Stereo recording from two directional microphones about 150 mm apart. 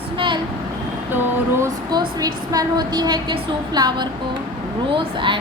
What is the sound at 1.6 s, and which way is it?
A woman's voice, 25° right (ahead or behind).